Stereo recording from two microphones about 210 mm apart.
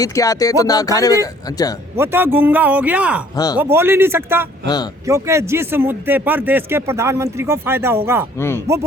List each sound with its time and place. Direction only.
0.0 s speech: 15° left (ahead or behind)
2.0 s speech: 10° right (ahead or behind)
3.3 s speech: 15° left (ahead or behind)
3.6 s speech: 10° right (ahead or behind)
4.6 s speech: 20° left (ahead or behind)
5.0 s speech: 15° right (ahead or behind)
8.4 s speech: 10° left (ahead or behind)